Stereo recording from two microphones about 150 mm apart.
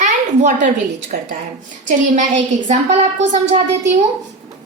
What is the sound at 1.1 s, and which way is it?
Speech, 90° right.